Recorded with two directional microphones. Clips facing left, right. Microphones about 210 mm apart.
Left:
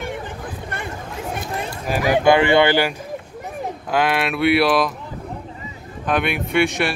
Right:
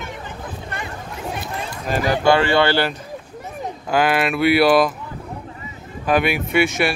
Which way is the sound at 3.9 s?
Centre (ahead or behind).